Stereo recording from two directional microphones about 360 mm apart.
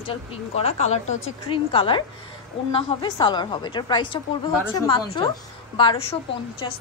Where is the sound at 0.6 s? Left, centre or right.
Centre.